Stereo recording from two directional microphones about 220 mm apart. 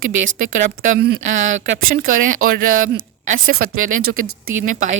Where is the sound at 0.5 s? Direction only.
50° right (ahead or behind).